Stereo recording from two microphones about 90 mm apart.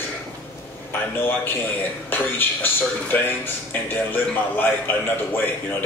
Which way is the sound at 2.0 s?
20° left (ahead or behind).